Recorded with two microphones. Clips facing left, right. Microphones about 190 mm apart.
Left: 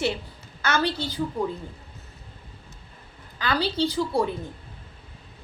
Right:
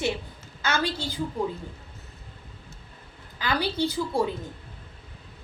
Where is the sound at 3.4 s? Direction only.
15° right (ahead or behind).